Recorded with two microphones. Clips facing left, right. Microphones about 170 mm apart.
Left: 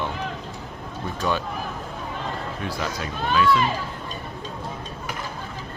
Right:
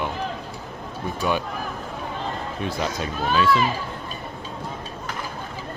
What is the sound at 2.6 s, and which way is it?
Speech, 20° right (ahead or behind).